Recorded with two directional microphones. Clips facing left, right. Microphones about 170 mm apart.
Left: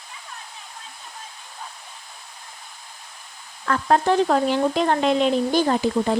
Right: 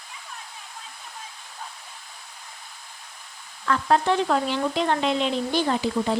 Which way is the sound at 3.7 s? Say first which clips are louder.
Left 2 dB; 45° left (ahead or behind).